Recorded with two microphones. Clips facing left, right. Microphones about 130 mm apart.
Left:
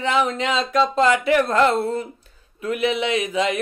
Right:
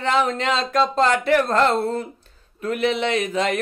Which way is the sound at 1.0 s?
40° right (ahead or behind).